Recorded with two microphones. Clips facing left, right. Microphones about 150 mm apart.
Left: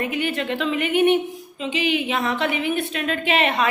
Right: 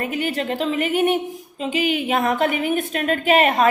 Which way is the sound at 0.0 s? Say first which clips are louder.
Right 1 dB; 40° right (ahead or behind).